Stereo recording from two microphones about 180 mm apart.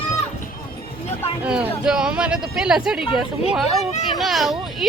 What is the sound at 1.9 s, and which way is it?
Speech, 5° right (ahead or behind).